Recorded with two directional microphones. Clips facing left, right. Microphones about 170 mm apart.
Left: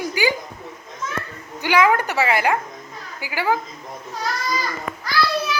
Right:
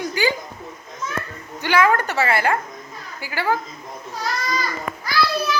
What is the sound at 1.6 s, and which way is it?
A woman's voice, 15° left (ahead or behind).